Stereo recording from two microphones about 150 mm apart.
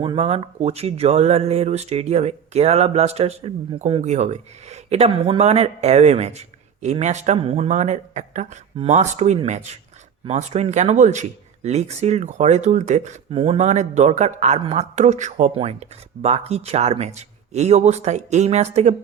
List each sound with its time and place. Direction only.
0.0 s speech: 40° right (ahead or behind); by 15.5 s 55° right (ahead or behind)
16.2 s speech: 45° right (ahead or behind)